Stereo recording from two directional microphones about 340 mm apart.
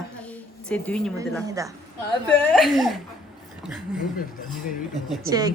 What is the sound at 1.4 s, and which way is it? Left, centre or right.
Speech, centre.